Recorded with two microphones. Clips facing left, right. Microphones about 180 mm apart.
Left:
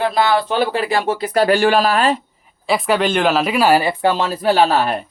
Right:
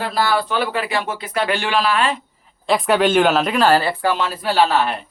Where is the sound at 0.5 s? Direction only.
30° left (ahead or behind).